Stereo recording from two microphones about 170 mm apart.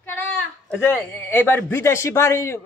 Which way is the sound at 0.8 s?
10° left (ahead or behind).